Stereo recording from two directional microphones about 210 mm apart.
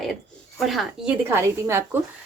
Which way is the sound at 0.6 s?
Centre (ahead or behind).